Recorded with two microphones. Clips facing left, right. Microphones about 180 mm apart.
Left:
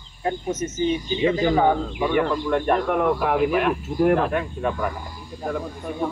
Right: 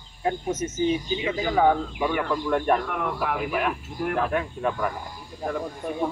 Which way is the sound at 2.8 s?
30° left (ahead or behind).